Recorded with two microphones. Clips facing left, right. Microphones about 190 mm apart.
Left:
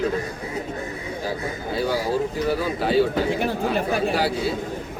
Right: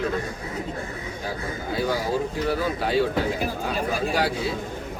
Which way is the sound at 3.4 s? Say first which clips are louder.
Left 4 dB; 65° left (ahead or behind).